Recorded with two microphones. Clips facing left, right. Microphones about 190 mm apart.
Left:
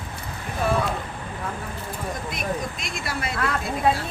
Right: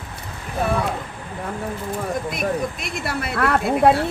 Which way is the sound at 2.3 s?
60° right (ahead or behind).